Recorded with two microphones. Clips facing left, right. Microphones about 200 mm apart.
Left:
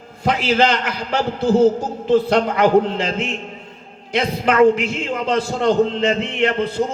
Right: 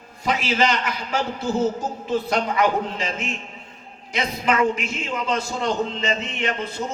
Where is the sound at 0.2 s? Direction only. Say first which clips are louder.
Left 5 dB; 60° left (ahead or behind).